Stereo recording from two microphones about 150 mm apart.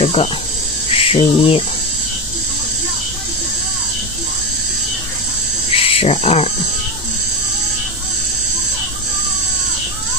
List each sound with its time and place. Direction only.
0.0 s cricket: 40° left (ahead or behind)
5.7 s frog: 40° left (ahead or behind)